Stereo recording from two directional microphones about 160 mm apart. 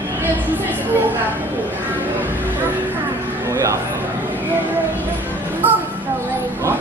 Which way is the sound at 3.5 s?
20° right (ahead or behind).